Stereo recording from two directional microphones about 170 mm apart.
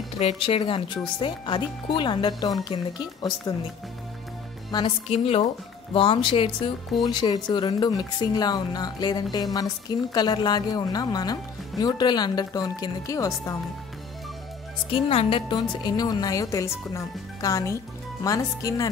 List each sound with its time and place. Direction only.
0.2 s speech: 35° left (ahead or behind)
4.6 s speech: 25° left (ahead or behind)
5.1 s speech: 40° left (ahead or behind); by 13.6 s 20° left (ahead or behind)
14.9 s speech: 35° left (ahead or behind)